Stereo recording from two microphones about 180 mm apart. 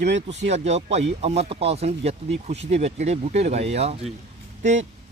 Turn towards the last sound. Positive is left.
turn(degrees=-40)  # may be behind; listen again after turning